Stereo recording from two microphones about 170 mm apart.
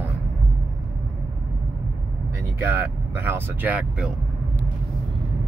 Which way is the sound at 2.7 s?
15° right (ahead or behind).